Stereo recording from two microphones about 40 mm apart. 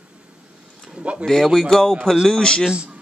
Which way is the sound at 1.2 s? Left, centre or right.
Centre.